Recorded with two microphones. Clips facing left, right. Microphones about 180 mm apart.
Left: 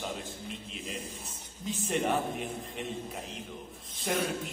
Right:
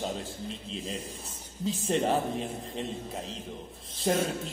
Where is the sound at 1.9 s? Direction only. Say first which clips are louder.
Right 2 dB; 30° right (ahead or behind).